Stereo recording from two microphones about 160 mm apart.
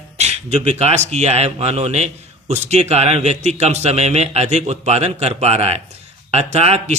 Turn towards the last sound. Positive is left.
turn(degrees=-40)  # may be behind; listen again after turning